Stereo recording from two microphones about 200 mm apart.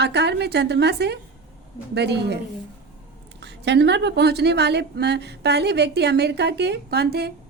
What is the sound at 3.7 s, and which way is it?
A woman's voice, 60° right (ahead or behind).